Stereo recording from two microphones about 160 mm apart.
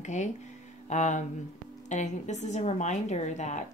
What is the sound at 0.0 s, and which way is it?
A woman's voice, 45° left (ahead or behind).